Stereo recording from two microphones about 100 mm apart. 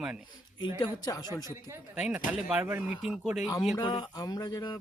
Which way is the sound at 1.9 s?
15° right (ahead or behind).